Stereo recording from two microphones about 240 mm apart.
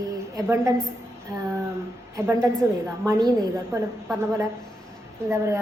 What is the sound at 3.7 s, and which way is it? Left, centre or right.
Speech, centre.